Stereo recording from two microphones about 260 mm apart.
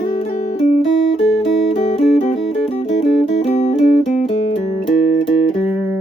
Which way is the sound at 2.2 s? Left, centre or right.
Left.